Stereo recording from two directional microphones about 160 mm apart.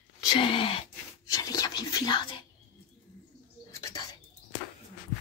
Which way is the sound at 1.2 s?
20° left (ahead or behind).